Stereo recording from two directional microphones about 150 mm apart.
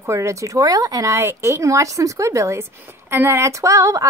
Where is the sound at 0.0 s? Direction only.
20° right (ahead or behind).